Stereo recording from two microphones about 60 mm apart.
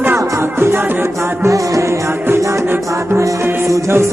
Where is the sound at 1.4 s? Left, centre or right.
Right.